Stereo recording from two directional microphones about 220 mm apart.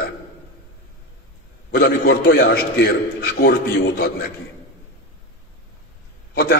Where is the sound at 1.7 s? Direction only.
45° left (ahead or behind).